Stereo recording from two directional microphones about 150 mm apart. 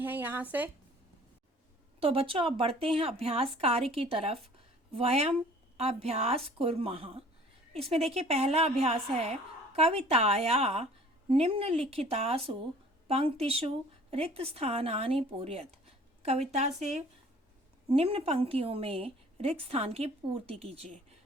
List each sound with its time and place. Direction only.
0.0 s speech: 15° right (ahead or behind)
2.0 s a woman's voice: 40° right (ahead or behind)
17.9 s a woman's voice: 40° right (ahead or behind)